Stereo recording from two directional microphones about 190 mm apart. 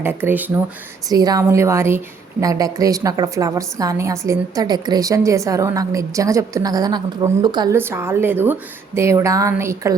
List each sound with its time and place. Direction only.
0.0 s a woman's voice: 10° right (ahead or behind)